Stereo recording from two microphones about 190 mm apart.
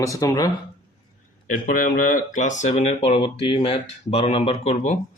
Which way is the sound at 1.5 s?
45° left (ahead or behind).